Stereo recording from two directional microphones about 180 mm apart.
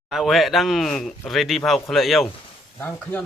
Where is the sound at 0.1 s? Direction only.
Centre (ahead or behind).